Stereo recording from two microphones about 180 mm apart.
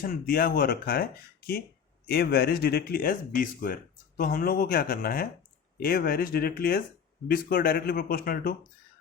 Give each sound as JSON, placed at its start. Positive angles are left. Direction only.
{"t": 0.0, "sound": "speech", "side_deg": 55}